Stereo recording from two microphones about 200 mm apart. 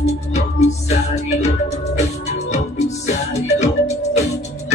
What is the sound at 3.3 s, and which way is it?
Music, 35° left (ahead or behind).